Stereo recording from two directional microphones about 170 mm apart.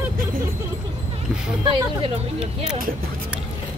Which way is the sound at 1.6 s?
30° right (ahead or behind).